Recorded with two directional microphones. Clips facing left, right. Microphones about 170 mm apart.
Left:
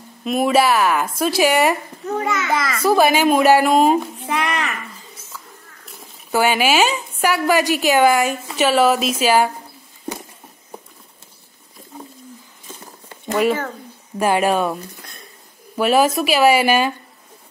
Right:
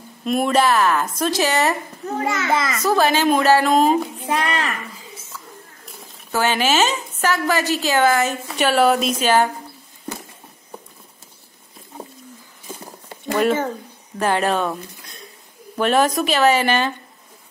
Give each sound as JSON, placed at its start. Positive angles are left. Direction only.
{"t": 0.2, "sound": "speech", "side_deg": 0}
{"t": 2.2, "sound": "a child's voice", "side_deg": -30}
{"t": 2.8, "sound": "speech", "side_deg": 10}
{"t": 4.2, "sound": "speech", "side_deg": -35}
{"t": 6.3, "sound": "speech", "side_deg": 10}
{"t": 8.5, "sound": "speech", "side_deg": 0}
{"t": 14.1, "sound": "speech", "side_deg": 10}
{"t": 15.8, "sound": "speech", "side_deg": 5}